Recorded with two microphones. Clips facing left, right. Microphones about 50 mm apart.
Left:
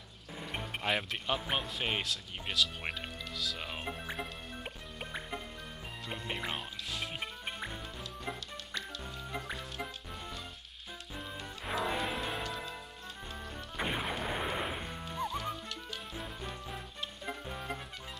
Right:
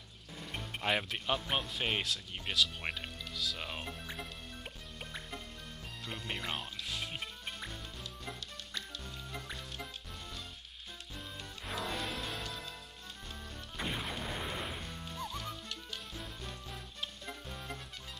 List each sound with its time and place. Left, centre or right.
0.4 s music: centre
0.8 s speech: centre
3.9 s speech: centre
6.0 s music: centre
7.4 s music: centre
9.0 s music: centre
11.1 s music: centre
13.7 s smash: centre
14.2 s music: centre
15.0 s music: centre